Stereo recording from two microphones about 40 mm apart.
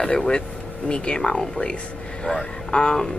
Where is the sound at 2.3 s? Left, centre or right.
Left.